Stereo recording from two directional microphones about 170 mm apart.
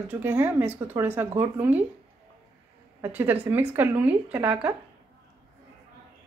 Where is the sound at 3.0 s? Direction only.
10° right (ahead or behind).